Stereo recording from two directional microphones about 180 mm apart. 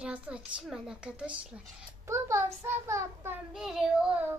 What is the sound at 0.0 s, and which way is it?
A child's voice, 5° right (ahead or behind).